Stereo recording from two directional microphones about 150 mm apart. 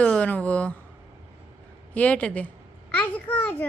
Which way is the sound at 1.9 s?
10° left (ahead or behind).